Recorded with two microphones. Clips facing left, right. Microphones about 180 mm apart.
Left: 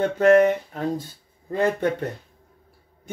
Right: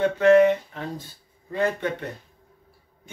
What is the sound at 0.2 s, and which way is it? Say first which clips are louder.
Speech: even; 45° left (ahead or behind).